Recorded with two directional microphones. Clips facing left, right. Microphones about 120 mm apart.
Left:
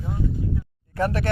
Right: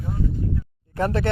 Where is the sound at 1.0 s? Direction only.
30° right (ahead or behind).